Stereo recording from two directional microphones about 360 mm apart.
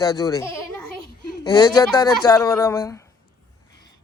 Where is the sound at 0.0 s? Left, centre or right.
Centre.